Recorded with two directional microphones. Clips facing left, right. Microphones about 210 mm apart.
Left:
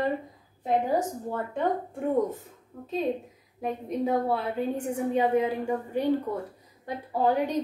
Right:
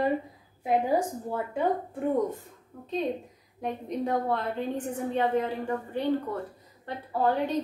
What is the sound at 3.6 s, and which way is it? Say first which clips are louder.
A woman's voice: left 2 dB; 5° left (ahead or behind).